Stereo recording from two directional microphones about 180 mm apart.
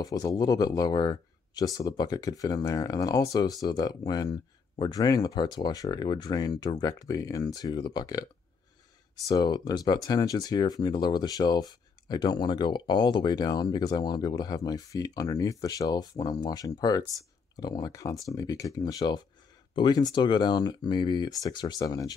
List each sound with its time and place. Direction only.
0.0 s speech: 20° left (ahead or behind)
9.3 s speech: 25° left (ahead or behind)